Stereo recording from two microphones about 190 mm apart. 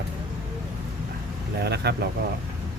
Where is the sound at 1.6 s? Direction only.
60° right (ahead or behind).